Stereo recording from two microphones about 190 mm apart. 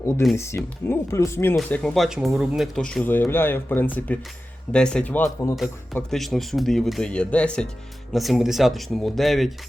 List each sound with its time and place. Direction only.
0.0 s speech: 15° left (ahead or behind)
1.5 s speech: centre (ahead or behind)